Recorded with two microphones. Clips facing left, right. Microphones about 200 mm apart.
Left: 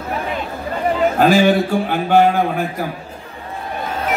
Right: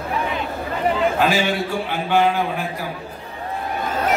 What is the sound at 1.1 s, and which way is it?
A man's voice, 40° left (ahead or behind).